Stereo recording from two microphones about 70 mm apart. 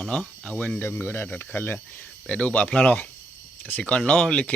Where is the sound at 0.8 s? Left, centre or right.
Left.